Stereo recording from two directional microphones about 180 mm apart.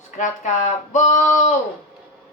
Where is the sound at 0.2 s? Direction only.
40° left (ahead or behind).